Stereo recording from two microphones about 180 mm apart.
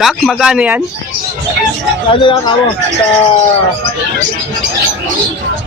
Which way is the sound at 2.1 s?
30° left (ahead or behind).